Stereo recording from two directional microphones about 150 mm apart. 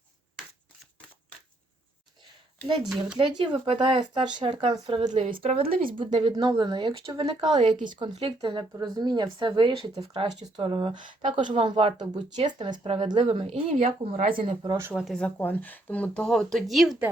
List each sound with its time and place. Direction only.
3.2 s speech: 35° right (ahead or behind)
9.8 s speech: 40° right (ahead or behind)
14.9 s speech: centre (ahead or behind)
15.4 s speech: 10° left (ahead or behind)